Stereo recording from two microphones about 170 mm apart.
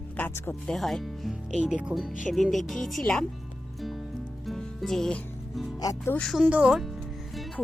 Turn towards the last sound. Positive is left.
turn(degrees=-5)  # may be behind; listen again after turning